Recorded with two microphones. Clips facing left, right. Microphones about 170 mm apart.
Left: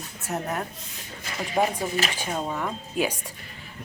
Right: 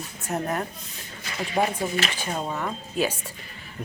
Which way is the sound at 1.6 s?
10° right (ahead or behind).